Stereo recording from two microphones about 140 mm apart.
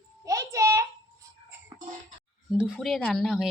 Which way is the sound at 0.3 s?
25° right (ahead or behind).